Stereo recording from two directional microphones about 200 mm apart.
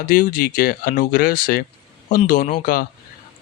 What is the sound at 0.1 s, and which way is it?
Speech, 45° left (ahead or behind).